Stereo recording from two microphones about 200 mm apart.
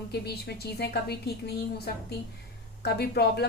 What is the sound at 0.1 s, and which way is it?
A woman's voice, 55° left (ahead or behind).